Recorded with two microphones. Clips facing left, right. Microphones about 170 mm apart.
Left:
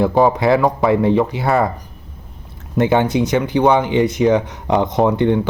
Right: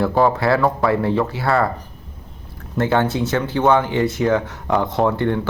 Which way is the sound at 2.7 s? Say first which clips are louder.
Left 3 dB; 15° left (ahead or behind).